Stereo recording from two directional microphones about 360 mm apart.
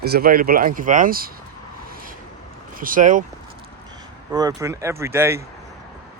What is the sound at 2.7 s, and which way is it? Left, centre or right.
Speech, right.